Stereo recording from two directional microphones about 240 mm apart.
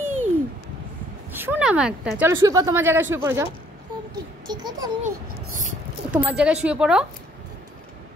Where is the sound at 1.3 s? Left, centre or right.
Centre.